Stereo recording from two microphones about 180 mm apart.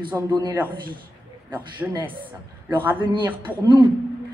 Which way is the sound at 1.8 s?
5° right (ahead or behind).